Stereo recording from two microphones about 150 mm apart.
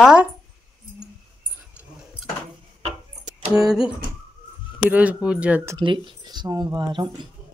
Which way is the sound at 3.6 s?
5° right (ahead or behind).